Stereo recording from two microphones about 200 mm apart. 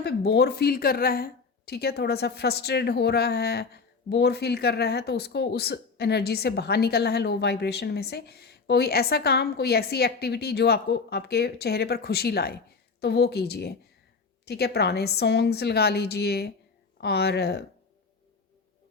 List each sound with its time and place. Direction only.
0.0 s a woman's voice: 55° left (ahead or behind)